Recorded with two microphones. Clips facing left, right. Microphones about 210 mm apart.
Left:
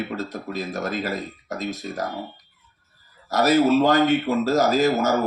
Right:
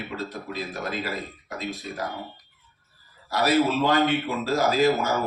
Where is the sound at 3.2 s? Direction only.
40° left (ahead or behind).